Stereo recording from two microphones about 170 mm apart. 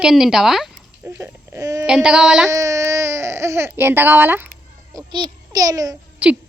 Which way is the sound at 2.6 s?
20° right (ahead or behind).